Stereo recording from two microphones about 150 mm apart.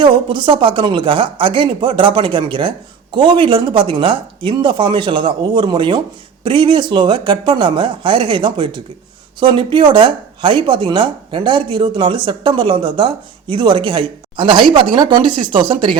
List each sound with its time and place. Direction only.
0.0 s speech: 30° right (ahead or behind)